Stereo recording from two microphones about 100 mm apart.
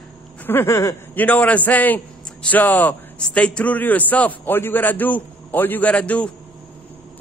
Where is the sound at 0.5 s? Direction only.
25° left (ahead or behind).